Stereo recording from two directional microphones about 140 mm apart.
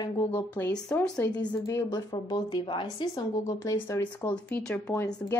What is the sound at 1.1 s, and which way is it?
Speech, 25° left (ahead or behind).